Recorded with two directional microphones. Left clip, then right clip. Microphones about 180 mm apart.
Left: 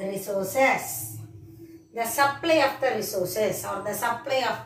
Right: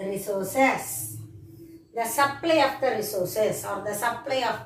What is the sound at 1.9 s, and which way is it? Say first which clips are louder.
A woman's voice: even; 10° right (ahead or behind).